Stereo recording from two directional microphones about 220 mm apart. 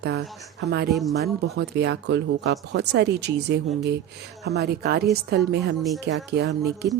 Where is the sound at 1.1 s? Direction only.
50° right (ahead or behind).